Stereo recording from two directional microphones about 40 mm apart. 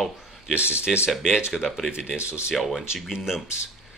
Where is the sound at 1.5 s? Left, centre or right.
Centre.